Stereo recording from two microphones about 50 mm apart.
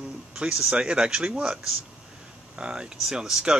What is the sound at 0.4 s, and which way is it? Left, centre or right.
Speech, centre.